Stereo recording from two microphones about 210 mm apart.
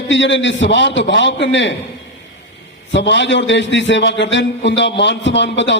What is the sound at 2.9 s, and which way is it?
A man's voice, 55° left (ahead or behind).